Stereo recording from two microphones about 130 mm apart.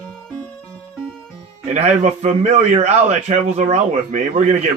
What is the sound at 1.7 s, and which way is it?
A man's voice, 60° right (ahead or behind).